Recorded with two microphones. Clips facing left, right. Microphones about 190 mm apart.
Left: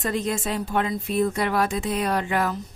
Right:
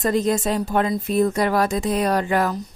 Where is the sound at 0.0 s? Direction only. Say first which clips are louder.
Right 6 dB; 40° right (ahead or behind).